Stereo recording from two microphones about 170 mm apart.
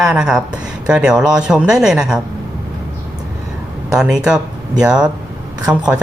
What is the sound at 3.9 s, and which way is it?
Speech, 5° right (ahead or behind).